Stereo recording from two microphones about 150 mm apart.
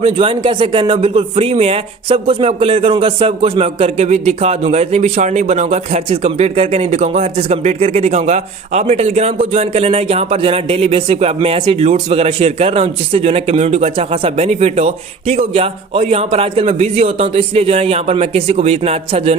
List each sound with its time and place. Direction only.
0.0 s a man's voice: 35° right (ahead or behind)